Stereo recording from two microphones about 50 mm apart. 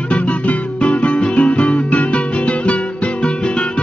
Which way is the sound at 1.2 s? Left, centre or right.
Centre.